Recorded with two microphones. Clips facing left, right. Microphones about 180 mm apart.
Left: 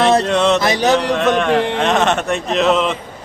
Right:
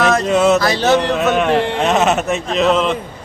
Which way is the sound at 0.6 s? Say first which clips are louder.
Right 1 dB; 15° left (ahead or behind).